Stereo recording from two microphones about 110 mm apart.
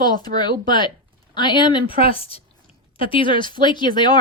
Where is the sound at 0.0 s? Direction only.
40° left (ahead or behind).